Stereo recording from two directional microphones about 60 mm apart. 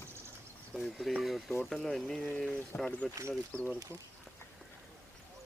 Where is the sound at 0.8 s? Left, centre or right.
Centre.